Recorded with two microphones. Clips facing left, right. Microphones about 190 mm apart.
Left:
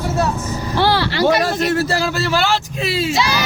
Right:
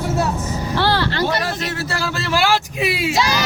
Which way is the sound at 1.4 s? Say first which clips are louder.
Left 7 dB; 40° left (ahead or behind).